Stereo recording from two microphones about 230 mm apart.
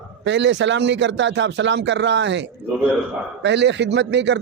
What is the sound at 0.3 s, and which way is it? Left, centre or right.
A man's voice, right.